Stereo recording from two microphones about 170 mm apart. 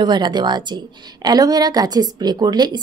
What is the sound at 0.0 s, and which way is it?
A woman's voice, 25° right (ahead or behind).